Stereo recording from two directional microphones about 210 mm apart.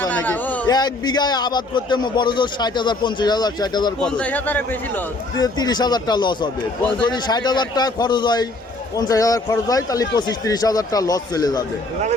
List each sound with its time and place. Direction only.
0.0 s a sound: 10° left (ahead or behind)
0.7 s a man's voice: 20° left (ahead or behind)
4.0 s a man's voice: 5° left (ahead or behind)